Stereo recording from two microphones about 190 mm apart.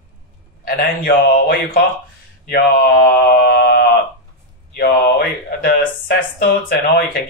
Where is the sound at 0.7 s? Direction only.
50° left (ahead or behind).